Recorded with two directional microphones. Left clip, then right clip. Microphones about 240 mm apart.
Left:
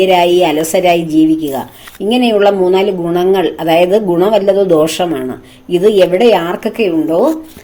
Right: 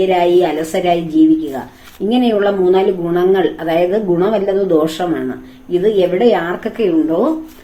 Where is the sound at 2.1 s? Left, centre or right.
Left.